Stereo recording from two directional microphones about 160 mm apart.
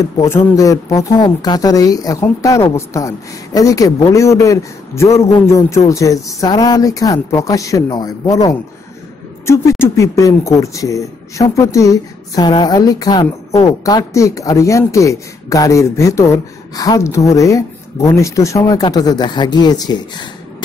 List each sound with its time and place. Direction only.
0.2 s speech: 15° left (ahead or behind)